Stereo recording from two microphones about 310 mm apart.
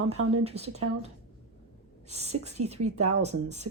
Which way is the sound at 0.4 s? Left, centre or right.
Centre.